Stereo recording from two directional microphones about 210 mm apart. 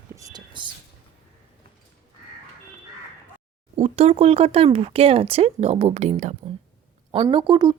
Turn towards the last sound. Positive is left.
turn(degrees=-20)  # may be behind; listen again after turning